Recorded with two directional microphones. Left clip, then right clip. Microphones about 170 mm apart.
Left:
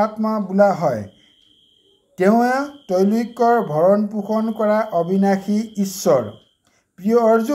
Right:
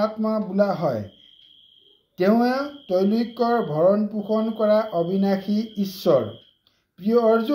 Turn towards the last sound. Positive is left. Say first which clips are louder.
# left 4 dB
turn(degrees=40)  # may be behind; listen again after turning